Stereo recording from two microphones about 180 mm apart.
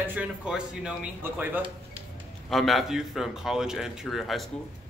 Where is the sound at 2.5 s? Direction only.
Centre (ahead or behind).